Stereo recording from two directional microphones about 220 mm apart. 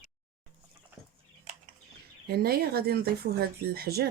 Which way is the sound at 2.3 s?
45° right (ahead or behind).